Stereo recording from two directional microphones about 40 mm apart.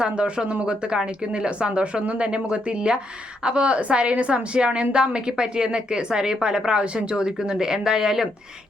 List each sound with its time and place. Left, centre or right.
0.0 s a woman's voice: right